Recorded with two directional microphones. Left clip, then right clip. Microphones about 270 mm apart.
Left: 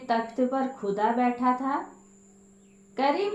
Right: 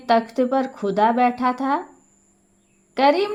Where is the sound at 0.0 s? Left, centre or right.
Right.